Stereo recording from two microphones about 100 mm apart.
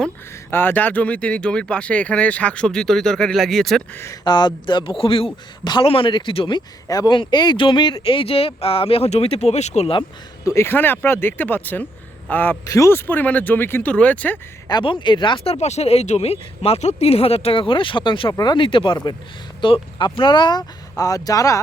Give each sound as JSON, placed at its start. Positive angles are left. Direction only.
{"t": 0.5, "sound": "speech", "side_deg": 20}
{"t": 3.9, "sound": "speech", "side_deg": 30}
{"t": 4.2, "sound": "a man's voice", "side_deg": 50}
{"t": 6.8, "sound": "speech", "side_deg": 40}
{"t": 7.1, "sound": "speech", "side_deg": 50}
{"t": 8.0, "sound": "speech", "side_deg": 65}
{"t": 10.4, "sound": "speech", "side_deg": 25}
{"t": 12.6, "sound": "speech", "side_deg": 30}
{"t": 14.7, "sound": "speech", "side_deg": 50}
{"t": 15.4, "sound": "speech", "side_deg": 90}
{"t": 18.3, "sound": "speech", "side_deg": 40}
{"t": 18.5, "sound": "speech", "side_deg": 55}